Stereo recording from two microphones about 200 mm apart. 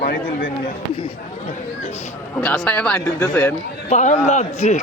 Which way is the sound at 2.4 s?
5° left (ahead or behind).